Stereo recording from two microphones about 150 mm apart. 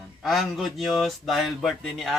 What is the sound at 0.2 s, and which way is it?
Speech, centre (ahead or behind).